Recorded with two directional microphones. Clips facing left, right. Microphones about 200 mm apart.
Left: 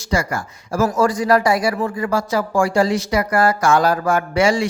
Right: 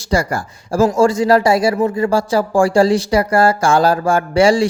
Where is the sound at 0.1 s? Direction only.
35° right (ahead or behind).